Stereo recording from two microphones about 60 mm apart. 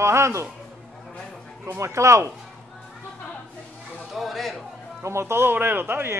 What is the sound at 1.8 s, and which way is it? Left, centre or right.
Speech, right.